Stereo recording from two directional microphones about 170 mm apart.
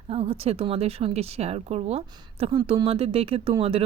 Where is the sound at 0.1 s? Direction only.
35° right (ahead or behind).